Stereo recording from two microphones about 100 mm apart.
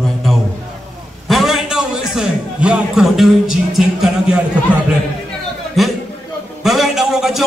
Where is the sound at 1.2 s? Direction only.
Centre (ahead or behind).